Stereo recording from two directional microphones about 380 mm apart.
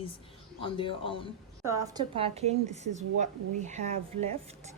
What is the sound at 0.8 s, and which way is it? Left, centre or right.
Speech, centre.